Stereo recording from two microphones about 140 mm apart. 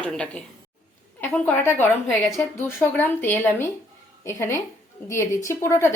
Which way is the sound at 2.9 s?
15° left (ahead or behind).